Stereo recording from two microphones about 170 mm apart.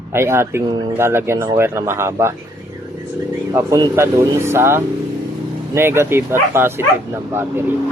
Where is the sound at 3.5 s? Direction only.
20° right (ahead or behind).